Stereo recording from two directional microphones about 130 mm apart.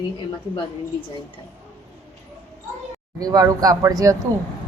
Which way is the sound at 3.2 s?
30° right (ahead or behind).